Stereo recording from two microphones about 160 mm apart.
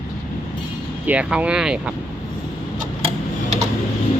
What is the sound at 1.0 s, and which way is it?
Speech, 10° right (ahead or behind).